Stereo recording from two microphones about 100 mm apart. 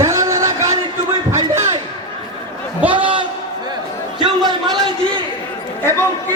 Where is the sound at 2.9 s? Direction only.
55° right (ahead or behind).